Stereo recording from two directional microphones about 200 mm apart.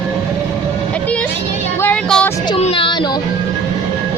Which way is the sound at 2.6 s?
30° left (ahead or behind).